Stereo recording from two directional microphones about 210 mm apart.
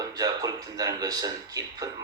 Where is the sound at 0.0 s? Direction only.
15° right (ahead or behind).